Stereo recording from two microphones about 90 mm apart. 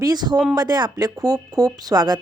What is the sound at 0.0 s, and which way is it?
Speech, 50° right (ahead or behind).